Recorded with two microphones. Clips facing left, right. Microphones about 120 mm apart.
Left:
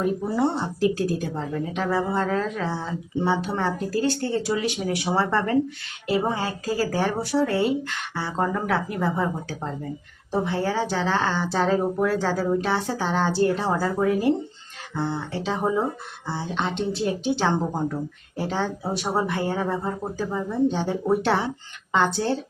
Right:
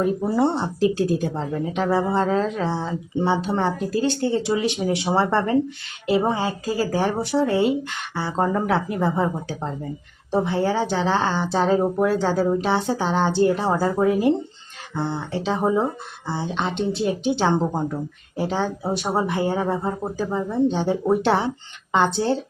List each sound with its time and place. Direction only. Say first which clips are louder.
0.0 s speech: right 3 dB; 30° right (ahead or behind)